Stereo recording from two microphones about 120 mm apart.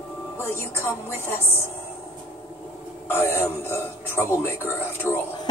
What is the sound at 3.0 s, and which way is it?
A man's voice, 20° left (ahead or behind).